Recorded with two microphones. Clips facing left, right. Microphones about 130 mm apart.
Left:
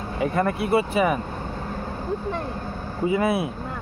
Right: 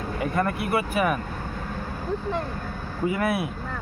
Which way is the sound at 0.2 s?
25° left (ahead or behind).